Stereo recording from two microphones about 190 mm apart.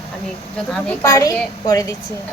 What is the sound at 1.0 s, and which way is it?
Speech, 15° left (ahead or behind).